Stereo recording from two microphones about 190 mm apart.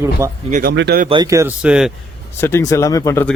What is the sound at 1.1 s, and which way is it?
Speech, 20° right (ahead or behind).